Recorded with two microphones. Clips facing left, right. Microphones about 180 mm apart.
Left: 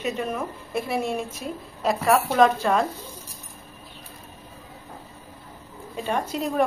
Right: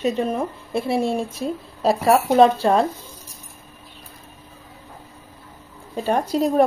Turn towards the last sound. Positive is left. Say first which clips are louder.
# right 6 dB
turn(degrees=-35)  # may be behind; listen again after turning